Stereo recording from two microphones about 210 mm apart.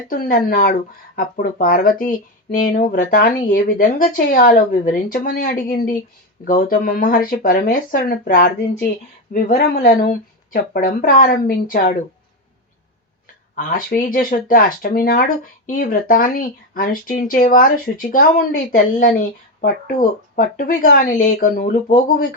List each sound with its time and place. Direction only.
0.1 s speech: 45° left (ahead or behind)
13.6 s speech: 40° left (ahead or behind)
20.3 s speech: 45° left (ahead or behind)